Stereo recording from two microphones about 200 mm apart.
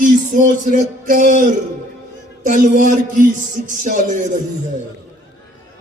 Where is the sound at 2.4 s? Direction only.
40° right (ahead or behind).